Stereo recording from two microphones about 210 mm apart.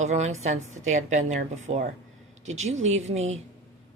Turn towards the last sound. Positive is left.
turn(degrees=-30)  # may be behind; listen again after turning